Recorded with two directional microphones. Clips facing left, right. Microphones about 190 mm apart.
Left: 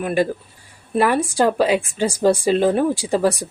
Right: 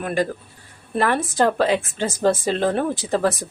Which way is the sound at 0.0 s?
10° left (ahead or behind).